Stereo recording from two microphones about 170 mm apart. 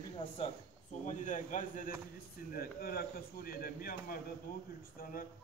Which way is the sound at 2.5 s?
60° left (ahead or behind).